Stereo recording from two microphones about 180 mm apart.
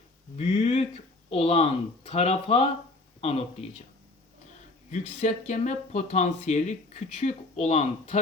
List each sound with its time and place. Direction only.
0.3 s a sound: 40° left (ahead or behind)
1.3 s speech: 35° left (ahead or behind)
4.9 s speech: 40° left (ahead or behind)